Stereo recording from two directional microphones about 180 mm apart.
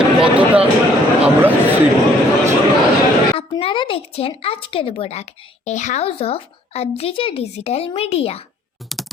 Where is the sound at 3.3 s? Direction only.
30° left (ahead or behind).